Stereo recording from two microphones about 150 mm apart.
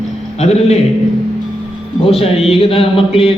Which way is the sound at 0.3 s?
45° left (ahead or behind).